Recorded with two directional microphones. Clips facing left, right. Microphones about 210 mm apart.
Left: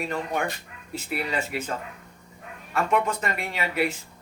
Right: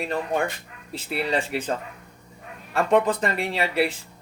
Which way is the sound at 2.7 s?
35° right (ahead or behind).